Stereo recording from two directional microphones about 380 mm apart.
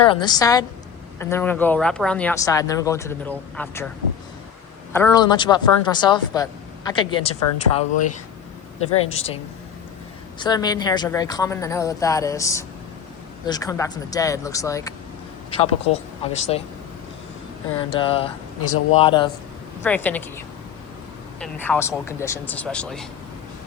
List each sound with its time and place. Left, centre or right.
0.0 s speech: centre
4.9 s speech: centre
10.3 s speech: centre
17.7 s speech: centre
21.4 s speech: centre